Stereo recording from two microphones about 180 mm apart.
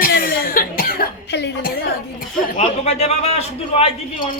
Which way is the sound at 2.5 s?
35° left (ahead or behind).